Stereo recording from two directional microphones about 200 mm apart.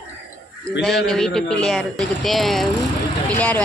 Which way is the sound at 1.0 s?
Centre (ahead or behind).